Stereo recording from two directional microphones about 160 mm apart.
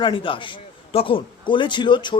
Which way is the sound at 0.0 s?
30° left (ahead or behind).